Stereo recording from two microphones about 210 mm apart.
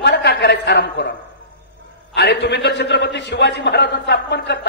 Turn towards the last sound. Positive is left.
turn(degrees=55)  # may be behind; listen again after turning